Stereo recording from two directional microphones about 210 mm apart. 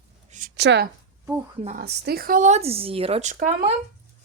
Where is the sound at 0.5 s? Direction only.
55° right (ahead or behind); by 3.8 s 35° right (ahead or behind).